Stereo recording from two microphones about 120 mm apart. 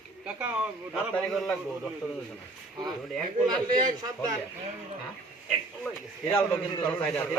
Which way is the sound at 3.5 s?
35° right (ahead or behind).